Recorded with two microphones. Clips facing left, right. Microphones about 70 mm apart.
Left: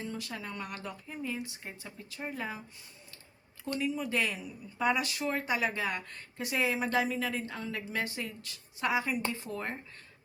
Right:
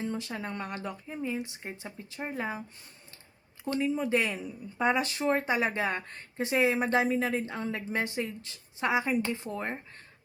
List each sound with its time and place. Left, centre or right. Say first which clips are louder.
0.1 s speech: right 4 dB; right
3.7 s speech: right 5 dB; right